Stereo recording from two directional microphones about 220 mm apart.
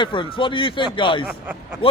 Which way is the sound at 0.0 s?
20° left (ahead or behind).